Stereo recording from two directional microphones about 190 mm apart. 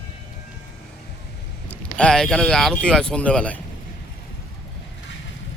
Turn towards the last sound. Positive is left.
turn(degrees=5)  # may be behind; listen again after turning